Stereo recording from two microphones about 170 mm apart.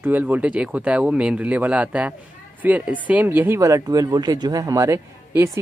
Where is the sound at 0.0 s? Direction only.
10° right (ahead or behind).